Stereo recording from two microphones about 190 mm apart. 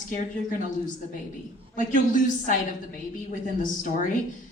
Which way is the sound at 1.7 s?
45° left (ahead or behind).